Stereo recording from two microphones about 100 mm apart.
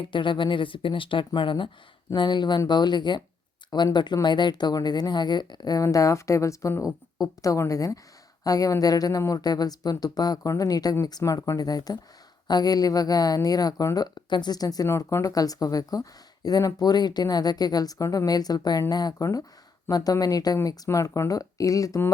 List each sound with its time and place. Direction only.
0.1 s a woman's voice: 55° left (ahead or behind); by 14.8 s 40° left (ahead or behind)
14.8 s speech: 30° left (ahead or behind)